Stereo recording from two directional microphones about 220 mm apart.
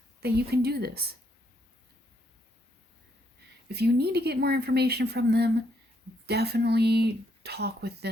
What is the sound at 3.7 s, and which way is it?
Speech, 45° right (ahead or behind).